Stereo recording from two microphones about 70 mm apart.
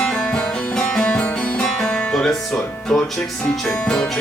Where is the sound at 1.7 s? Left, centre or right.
Centre.